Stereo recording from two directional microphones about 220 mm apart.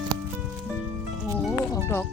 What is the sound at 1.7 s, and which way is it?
Music, 10° left (ahead or behind).